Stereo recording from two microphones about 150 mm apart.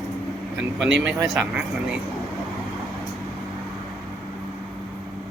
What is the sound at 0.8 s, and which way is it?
Speech, 5° right (ahead or behind).